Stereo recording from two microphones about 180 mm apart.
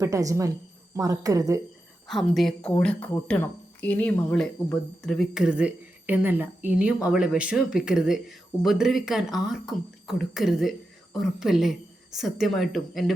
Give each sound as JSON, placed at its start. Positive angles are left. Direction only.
{"t": 0.0, "sound": "a woman's voice", "side_deg": -20}
{"t": 2.0, "sound": "speech", "side_deg": 0}